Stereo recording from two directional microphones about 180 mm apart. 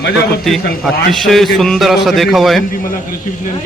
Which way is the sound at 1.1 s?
Centre (ahead or behind).